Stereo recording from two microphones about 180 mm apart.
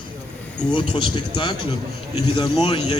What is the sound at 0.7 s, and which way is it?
Speech, 25° left (ahead or behind).